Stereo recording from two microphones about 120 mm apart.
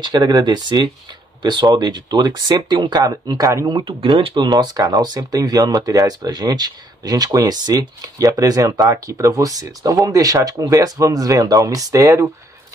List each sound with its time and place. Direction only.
0.0 s speech: 35° right (ahead or behind)
3.7 s speech: 45° right (ahead or behind); by 12.3 s 25° right (ahead or behind)